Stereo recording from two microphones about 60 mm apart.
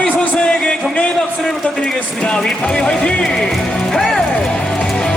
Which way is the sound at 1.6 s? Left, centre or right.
Left.